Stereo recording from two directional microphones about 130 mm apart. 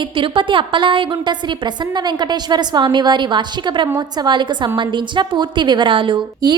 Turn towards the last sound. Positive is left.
turn(degrees=-40)  # may be behind; listen again after turning